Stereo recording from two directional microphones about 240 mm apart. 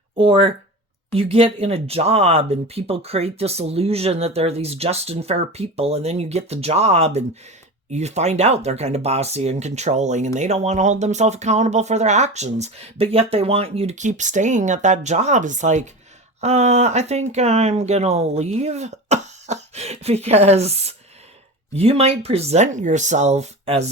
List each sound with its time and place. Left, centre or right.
0.2 s speech: right